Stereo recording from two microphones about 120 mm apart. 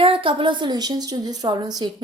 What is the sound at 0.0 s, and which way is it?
A woman's voice, 45° right (ahead or behind).